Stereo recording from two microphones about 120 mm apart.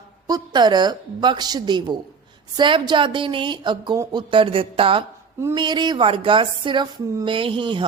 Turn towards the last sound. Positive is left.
turn(degrees=-45)  # may be behind; listen again after turning